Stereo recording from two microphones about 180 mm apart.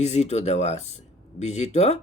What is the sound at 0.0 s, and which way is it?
Speech, 35° left (ahead or behind).